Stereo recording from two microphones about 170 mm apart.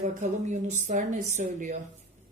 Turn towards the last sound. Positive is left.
turn(degrees=-45)  # may be behind; listen again after turning